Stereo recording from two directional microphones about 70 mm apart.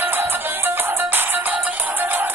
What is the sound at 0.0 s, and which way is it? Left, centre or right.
Music, right.